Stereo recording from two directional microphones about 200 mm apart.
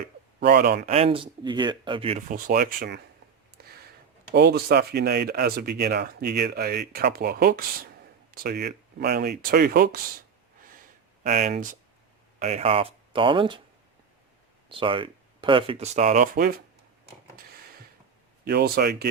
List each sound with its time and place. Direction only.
0.3 s speech: 55° right (ahead or behind)
0.9 s speech: 30° right (ahead or behind); by 10.0 s 45° right (ahead or behind)
11.2 s speech: 40° right (ahead or behind); by 13.6 s 25° right (ahead or behind)
14.7 s speech: 25° right (ahead or behind); by 16.6 s 45° right (ahead or behind)
17.3 s a sound: 50° right (ahead or behind)
18.4 s speech: 55° right (ahead or behind)